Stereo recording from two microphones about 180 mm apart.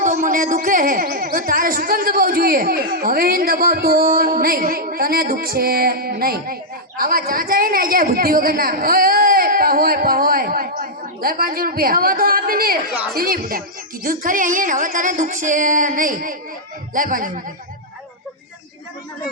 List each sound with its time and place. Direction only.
0.0 s speech: 45° right (ahead or behind)